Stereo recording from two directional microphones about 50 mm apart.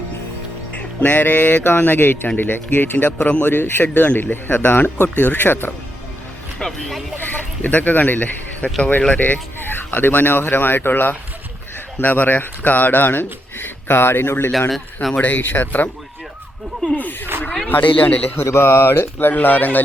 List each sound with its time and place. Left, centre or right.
0.7 s speech: left
3.4 s speech: left
3.8 s speech: left
4.2 s speech: left
6.6 s speech: centre
7.2 s speech: left
15.2 s speech: left
17.7 s speech: left
18.3 s speech: left
19.3 s speech: left